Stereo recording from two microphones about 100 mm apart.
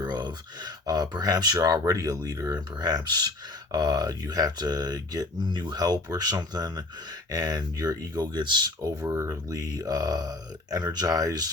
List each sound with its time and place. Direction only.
0.1 s speech: 45° right (ahead or behind)